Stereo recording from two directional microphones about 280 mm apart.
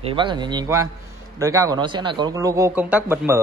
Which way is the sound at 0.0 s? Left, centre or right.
Centre.